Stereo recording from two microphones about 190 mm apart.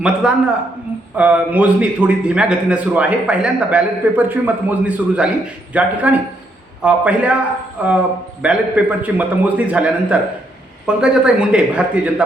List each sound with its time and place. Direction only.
0.0 s a man's voice: 5° right (ahead or behind)